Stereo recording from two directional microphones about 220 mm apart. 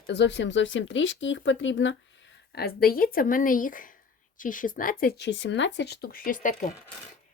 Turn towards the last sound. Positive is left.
turn(degrees=35)  # may be behind; listen again after turning